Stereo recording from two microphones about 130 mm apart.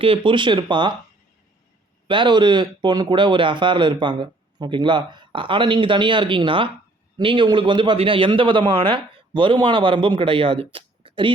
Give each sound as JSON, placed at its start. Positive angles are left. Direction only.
{"t": 0.0, "sound": "speech", "side_deg": -45}
{"t": 2.0, "sound": "speech", "side_deg": -40}